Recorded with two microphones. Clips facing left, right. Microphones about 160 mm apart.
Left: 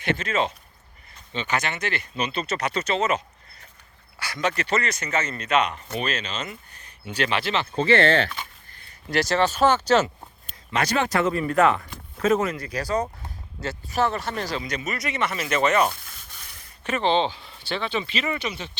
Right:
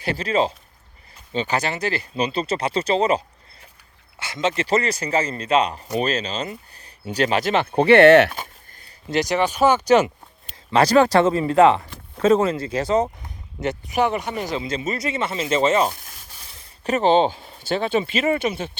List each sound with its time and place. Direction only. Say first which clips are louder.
0.0 s speech: right 3 dB; 35° right (ahead or behind); by 8.3 s 70° right (ahead or behind)
8.3 s a sound: right 2 dB; 45° right (ahead or behind)
9.0 s speech: right 1 dB; 20° right (ahead or behind)
10.7 s speech: right 8 dB; 35° right (ahead or behind)
15.9 s speech: right 1 dB; 40° right (ahead or behind)